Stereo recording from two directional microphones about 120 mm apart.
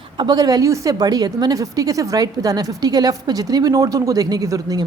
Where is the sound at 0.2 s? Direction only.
35° right (ahead or behind).